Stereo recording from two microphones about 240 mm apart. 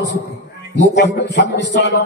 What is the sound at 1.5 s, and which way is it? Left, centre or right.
Speech, left.